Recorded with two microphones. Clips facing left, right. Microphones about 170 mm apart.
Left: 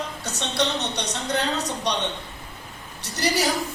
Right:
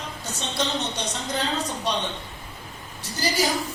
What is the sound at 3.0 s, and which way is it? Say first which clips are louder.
Speech: left 2 dB; 70° left (ahead or behind).